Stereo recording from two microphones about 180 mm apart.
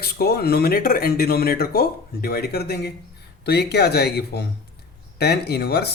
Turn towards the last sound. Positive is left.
turn(degrees=65)  # may be behind; listen again after turning